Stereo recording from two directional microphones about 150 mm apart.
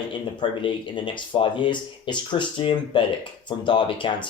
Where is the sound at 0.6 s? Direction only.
35° left (ahead or behind).